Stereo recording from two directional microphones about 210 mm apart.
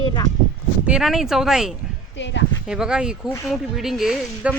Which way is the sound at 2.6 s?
5° right (ahead or behind).